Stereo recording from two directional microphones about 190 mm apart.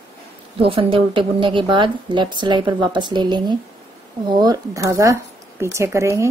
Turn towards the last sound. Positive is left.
turn(degrees=-15)  # may be behind; listen again after turning